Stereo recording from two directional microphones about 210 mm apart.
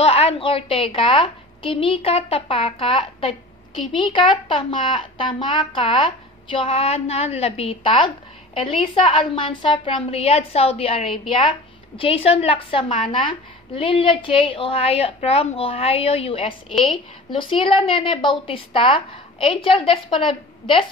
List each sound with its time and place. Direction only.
0.0 s a woman's voice: 30° left (ahead or behind)